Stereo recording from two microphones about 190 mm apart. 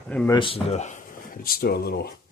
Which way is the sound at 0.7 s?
40° left (ahead or behind).